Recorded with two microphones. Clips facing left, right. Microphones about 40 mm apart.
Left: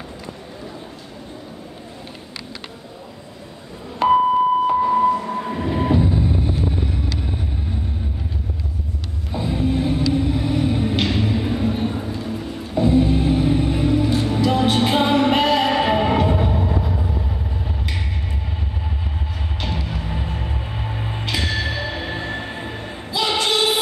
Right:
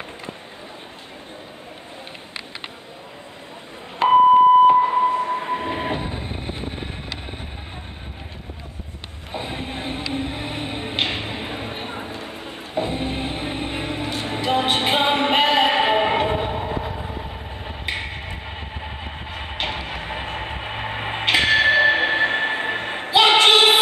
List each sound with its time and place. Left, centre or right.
4.0 s a sound: right
9.3 s vehicle: right
19.3 s music: right